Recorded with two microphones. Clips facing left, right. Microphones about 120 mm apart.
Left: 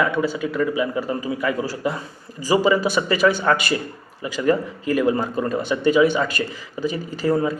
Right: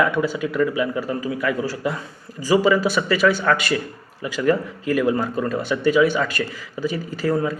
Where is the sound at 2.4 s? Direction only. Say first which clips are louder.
Right 1 dB; centre (ahead or behind).